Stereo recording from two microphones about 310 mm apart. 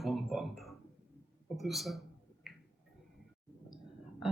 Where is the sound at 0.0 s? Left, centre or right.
Centre.